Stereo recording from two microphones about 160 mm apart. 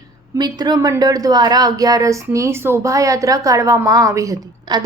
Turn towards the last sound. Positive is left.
turn(degrees=-20)  # may be behind; listen again after turning